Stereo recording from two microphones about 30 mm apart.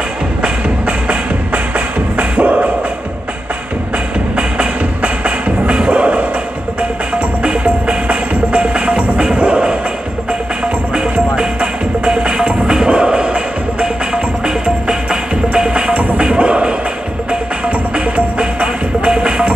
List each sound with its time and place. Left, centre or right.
0.4 s music: right
4.4 s music: right
14.5 s music: right
17.6 s music: right
19.0 s music: right